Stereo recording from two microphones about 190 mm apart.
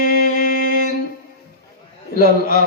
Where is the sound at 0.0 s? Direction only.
50° left (ahead or behind).